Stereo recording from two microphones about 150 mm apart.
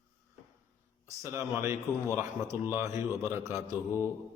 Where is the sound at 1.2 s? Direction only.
20° right (ahead or behind).